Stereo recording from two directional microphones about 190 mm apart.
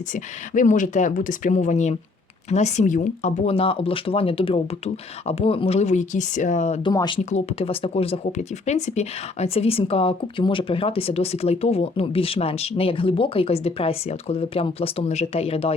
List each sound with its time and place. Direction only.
0.5 s speech: 45° left (ahead or behind)
6.8 s speech: 25° left (ahead or behind)